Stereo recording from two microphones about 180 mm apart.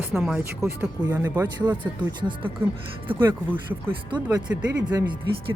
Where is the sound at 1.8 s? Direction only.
25° right (ahead or behind).